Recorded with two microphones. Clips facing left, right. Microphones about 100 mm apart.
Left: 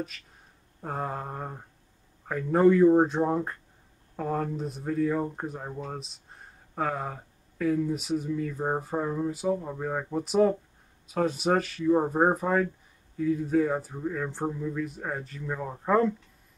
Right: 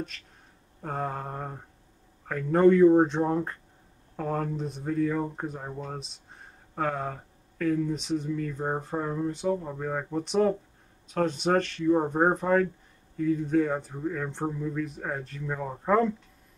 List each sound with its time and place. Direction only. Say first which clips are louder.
0.8 s speech: even; 5° left (ahead or behind)